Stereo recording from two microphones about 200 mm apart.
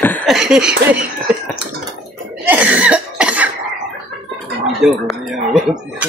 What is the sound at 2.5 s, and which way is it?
Cough, 5° right (ahead or behind).